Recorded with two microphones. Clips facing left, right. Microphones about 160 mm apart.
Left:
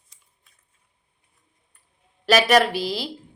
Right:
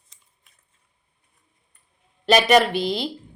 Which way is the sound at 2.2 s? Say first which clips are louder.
Right 1 dB; 5° left (ahead or behind).